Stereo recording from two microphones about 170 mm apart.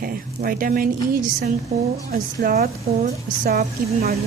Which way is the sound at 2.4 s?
55° right (ahead or behind).